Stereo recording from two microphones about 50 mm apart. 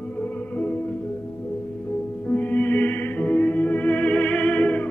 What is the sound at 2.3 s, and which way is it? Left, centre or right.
Music, left.